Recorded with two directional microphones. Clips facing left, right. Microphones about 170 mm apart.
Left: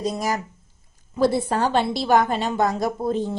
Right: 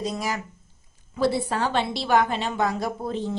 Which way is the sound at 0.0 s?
45° left (ahead or behind).